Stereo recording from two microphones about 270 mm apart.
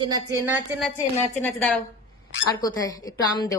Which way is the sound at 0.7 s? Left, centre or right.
Centre.